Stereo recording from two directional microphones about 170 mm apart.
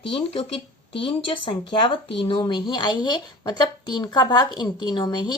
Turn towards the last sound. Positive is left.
turn(degrees=25)  # may be behind; listen again after turning